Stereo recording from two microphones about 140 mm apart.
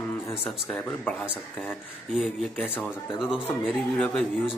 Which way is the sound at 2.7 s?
15° left (ahead or behind).